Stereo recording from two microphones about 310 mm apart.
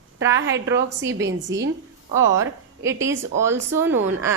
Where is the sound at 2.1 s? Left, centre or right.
Centre.